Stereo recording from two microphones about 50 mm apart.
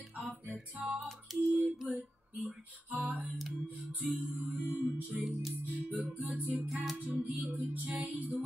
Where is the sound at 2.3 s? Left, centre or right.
Right.